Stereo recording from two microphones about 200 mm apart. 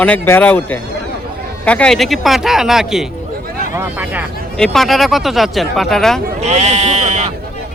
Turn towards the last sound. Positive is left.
turn(degrees=-35)  # may be behind; listen again after turning